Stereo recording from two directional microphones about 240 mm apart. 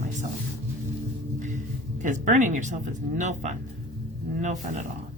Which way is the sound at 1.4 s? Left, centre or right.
Right.